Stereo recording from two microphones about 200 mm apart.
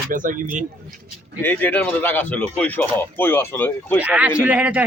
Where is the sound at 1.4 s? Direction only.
10° left (ahead or behind).